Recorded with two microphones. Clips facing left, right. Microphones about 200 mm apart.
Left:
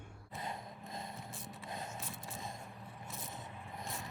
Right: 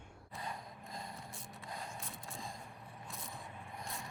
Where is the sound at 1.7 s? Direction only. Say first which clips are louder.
Left 2 dB; 20° left (ahead or behind).